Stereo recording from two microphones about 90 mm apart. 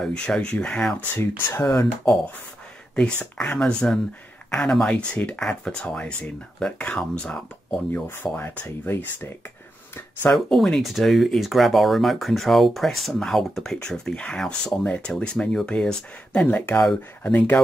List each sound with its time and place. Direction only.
0.0 s speech: 10° left (ahead or behind)
3.0 s speech: 15° left (ahead or behind)
8.8 s speech: 25° left (ahead or behind)
10.3 s speech: 5° left (ahead or behind); by 17.6 s 20° left (ahead or behind)